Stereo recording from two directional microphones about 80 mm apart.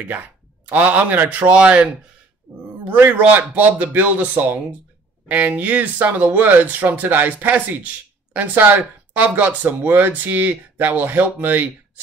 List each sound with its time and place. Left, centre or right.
0.7 s speech: right
2.9 s speech: right